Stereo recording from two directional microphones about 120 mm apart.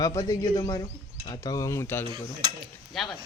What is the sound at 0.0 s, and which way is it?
A man's voice, 30° left (ahead or behind).